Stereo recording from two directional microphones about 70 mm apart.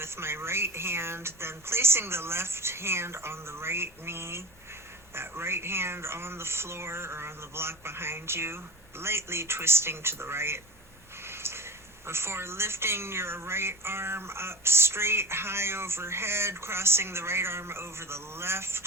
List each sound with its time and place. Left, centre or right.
0.0 s a woman's voice: right
11.3 s a sound: right
12.0 s a woman's voice: right